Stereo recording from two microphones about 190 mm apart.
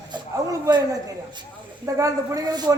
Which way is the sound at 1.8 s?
15° right (ahead or behind).